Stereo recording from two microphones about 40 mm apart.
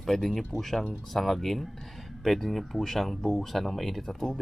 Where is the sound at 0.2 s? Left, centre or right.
Centre.